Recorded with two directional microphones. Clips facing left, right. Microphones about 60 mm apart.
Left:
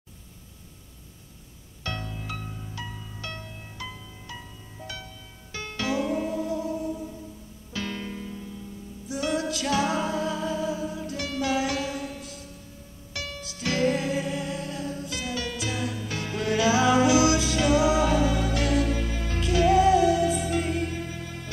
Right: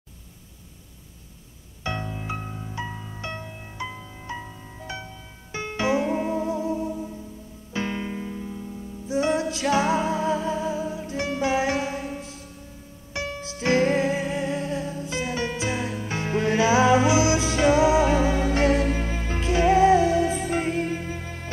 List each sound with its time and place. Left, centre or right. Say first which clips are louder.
1.8 s music: right 4 dB; right